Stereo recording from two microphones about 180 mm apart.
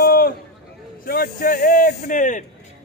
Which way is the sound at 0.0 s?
60° left (ahead or behind).